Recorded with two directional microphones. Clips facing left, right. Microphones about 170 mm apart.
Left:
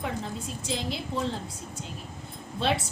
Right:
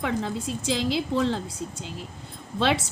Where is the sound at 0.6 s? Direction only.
85° right.